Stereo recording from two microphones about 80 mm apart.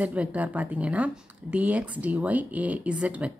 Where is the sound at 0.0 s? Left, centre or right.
Centre.